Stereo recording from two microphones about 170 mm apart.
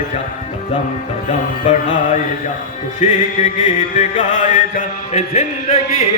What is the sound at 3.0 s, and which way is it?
Mantra, 45° left (ahead or behind).